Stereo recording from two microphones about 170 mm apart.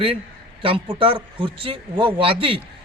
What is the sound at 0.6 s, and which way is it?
A man's voice, 30° right (ahead or behind).